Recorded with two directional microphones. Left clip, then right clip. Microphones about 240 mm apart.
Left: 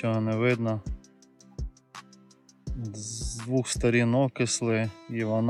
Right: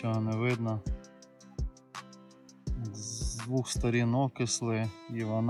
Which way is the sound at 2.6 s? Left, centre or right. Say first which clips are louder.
Left 2 dB; centre.